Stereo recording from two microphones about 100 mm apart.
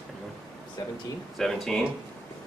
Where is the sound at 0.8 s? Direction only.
40° left (ahead or behind).